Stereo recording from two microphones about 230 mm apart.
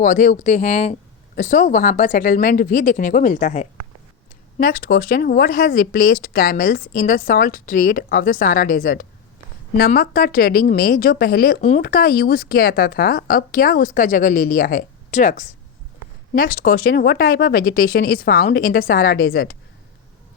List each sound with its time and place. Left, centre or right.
0.0 s a woman's voice: left